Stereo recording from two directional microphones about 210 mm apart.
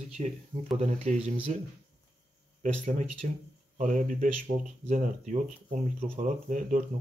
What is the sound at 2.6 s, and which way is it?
Speech, 35° right (ahead or behind).